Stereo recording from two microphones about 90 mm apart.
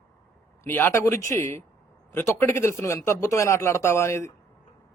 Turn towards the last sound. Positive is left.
turn(degrees=30)  # may be behind; listen again after turning